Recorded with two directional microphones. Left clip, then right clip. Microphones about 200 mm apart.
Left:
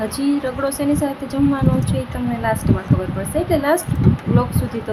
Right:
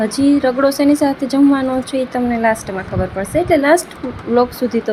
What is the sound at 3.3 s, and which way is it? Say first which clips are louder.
A woman's voice: right 5 dB; 15° right (ahead or behind).